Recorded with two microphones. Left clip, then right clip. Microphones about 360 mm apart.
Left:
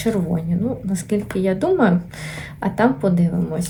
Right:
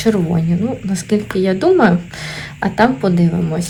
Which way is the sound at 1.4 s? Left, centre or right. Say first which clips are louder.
Right 5 dB; right.